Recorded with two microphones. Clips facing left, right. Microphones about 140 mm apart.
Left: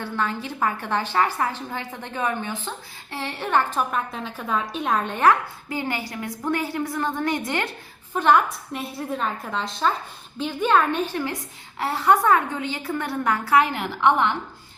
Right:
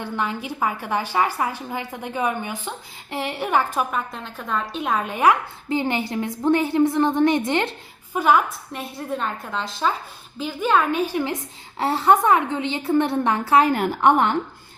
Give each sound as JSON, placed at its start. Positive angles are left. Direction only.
{"t": 0.0, "sound": "a woman's voice", "side_deg": -15}
{"t": 4.1, "sound": "a woman's voice", "side_deg": 0}
{"t": 5.6, "sound": "a woman's voice", "side_deg": -25}
{"t": 8.1, "sound": "a woman's voice", "side_deg": -5}
{"t": 11.8, "sound": "a woman's voice", "side_deg": -25}
{"t": 13.7, "sound": "a woman's voice", "side_deg": -45}